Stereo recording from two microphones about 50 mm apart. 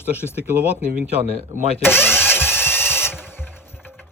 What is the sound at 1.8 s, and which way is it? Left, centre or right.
Speech, left.